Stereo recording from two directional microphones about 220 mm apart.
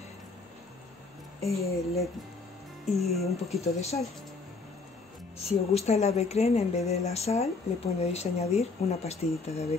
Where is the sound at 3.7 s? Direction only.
30° left (ahead or behind).